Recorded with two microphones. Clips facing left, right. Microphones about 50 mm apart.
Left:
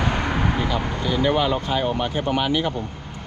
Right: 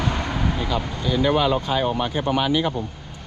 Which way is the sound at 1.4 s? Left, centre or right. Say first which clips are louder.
Right 1 dB; left.